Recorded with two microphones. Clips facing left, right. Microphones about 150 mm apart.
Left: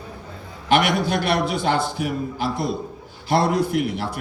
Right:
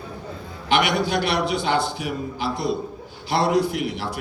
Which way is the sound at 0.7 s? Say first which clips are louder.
Left 2 dB; 50° left (ahead or behind).